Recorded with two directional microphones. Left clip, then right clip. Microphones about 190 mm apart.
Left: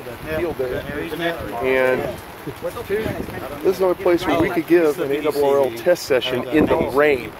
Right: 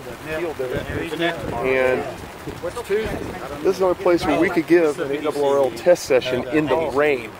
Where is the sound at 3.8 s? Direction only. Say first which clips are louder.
Even; 15° right (ahead or behind).